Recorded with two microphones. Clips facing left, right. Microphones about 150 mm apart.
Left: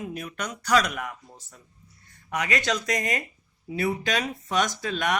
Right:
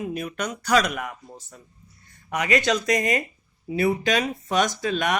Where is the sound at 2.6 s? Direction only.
15° right (ahead or behind).